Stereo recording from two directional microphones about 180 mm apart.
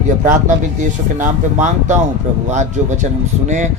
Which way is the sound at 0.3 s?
45° right (ahead or behind).